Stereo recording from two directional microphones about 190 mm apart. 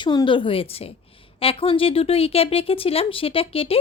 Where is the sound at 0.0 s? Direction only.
25° left (ahead or behind).